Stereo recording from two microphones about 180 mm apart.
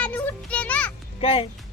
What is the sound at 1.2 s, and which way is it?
Speech, 30° left (ahead or behind).